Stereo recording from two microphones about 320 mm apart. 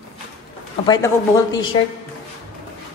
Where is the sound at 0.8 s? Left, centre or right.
Centre.